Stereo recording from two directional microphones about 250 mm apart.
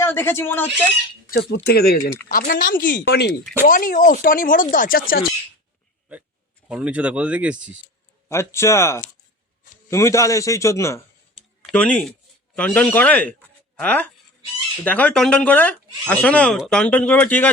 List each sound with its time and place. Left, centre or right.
0.0 s a man's voice: centre
1.3 s speech: left
6.7 s speech: centre
8.3 s a man's voice: centre
11.3 s a sound: centre
12.5 s a man's voice: centre